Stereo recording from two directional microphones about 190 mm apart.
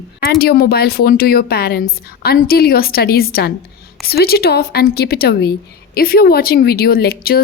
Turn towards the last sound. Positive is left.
turn(degrees=55)  # may be behind; listen again after turning